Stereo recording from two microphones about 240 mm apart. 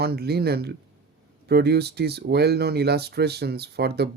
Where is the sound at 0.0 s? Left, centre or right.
Right.